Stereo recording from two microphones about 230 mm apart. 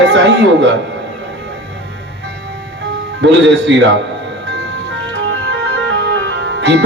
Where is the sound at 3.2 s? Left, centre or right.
Right.